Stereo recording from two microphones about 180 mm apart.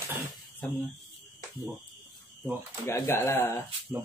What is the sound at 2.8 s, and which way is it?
Speech, 15° left (ahead or behind).